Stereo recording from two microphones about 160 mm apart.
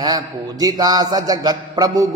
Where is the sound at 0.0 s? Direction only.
25° right (ahead or behind).